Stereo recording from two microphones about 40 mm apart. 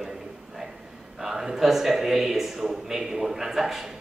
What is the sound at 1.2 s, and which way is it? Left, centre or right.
A man's voice, centre.